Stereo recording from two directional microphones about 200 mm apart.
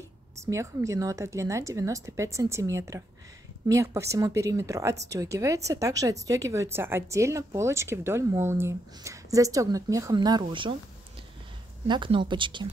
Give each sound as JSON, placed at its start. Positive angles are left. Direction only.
{"t": 0.4, "sound": "speech", "side_deg": -15}
{"t": 11.9, "sound": "speech", "side_deg": -25}